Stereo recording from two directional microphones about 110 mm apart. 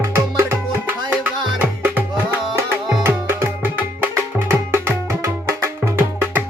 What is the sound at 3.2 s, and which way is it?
Music, 20° right (ahead or behind).